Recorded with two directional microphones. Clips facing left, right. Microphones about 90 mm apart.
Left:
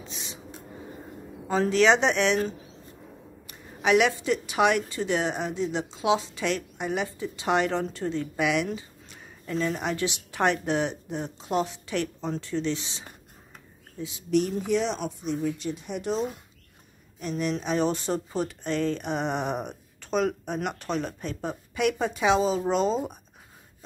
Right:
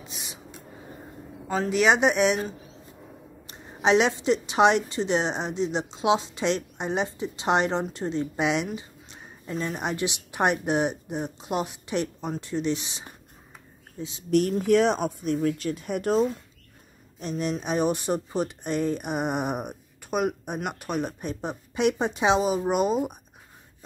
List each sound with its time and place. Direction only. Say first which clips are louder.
0.0 s a sound: left 1 dB; 15° right (ahead or behind)
1.5 s a man's voice: left 1 dB; 5° right (ahead or behind)
3.4 s a woman's voice: right 2 dB; 25° right (ahead or behind)
14.6 s speech: right 5 dB; 55° right (ahead or behind)
17.2 s speech: even; 20° right (ahead or behind)